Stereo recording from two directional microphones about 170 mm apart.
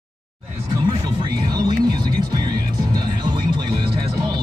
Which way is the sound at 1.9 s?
25° right (ahead or behind).